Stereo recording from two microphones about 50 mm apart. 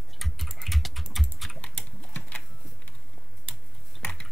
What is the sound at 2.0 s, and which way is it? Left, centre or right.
Typing, left.